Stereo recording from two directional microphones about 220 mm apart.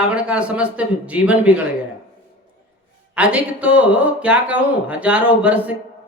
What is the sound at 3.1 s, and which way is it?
Speech, 5° right (ahead or behind).